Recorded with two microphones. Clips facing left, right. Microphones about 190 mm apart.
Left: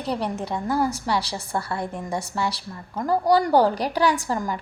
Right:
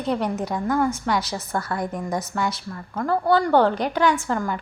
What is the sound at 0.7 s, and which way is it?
A woman's voice, 35° left (ahead or behind).